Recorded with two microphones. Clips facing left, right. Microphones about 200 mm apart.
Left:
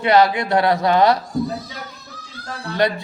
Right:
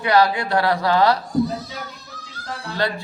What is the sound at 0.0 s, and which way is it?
Speech, 25° left (ahead or behind).